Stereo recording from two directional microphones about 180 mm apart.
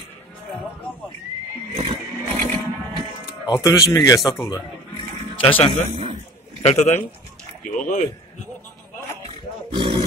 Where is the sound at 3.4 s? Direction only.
20° left (ahead or behind).